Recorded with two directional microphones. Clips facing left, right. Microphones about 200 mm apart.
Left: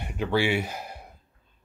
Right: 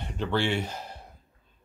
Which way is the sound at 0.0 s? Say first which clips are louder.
Left 3 dB; 10° left (ahead or behind).